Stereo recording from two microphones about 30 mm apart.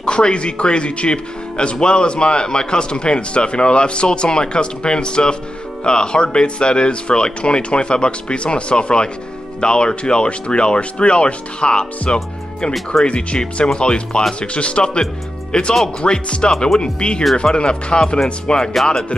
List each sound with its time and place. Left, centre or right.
0.0 s speech: left
15.5 s speech: left
16.5 s speech: centre
16.8 s speech: left